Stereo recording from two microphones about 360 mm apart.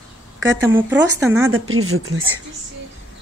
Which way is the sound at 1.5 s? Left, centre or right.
Right.